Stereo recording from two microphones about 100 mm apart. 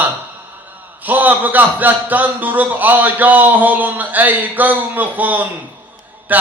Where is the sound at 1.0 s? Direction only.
15° right (ahead or behind).